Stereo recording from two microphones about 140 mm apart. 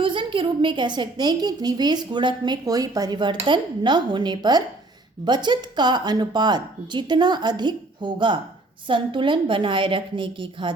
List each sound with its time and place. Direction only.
0.0 s a woman's voice: 35° right (ahead or behind)